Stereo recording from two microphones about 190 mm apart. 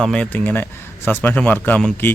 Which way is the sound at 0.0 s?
5° left (ahead or behind).